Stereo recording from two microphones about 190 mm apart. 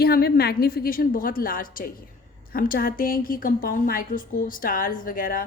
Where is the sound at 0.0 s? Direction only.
55° left (ahead or behind).